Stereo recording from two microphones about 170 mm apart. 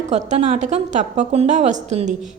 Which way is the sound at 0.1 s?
45° right (ahead or behind).